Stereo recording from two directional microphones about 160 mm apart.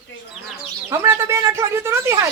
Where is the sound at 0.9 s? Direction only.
20° right (ahead or behind).